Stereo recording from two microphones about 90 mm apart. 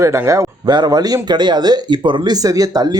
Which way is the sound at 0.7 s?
50° right (ahead or behind).